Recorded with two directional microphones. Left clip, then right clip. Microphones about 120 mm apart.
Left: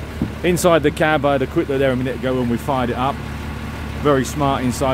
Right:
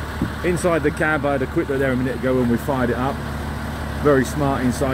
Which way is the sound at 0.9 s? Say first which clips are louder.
Left 3 dB; 30° left (ahead or behind).